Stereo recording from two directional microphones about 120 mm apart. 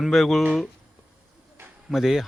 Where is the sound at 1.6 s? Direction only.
20° right (ahead or behind).